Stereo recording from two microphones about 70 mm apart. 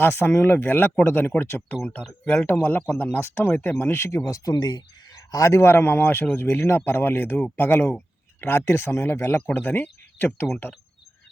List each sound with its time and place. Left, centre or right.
0.0 s speech: left
1.7 s speech: centre
4.3 s speech: left
4.5 s speech: left
5.5 s speech: left
9.3 s speech: left